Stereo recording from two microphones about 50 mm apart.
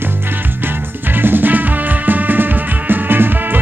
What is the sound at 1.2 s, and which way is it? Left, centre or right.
Music, right.